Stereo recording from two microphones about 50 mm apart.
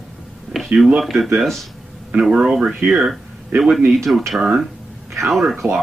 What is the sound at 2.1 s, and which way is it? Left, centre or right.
Speech, centre.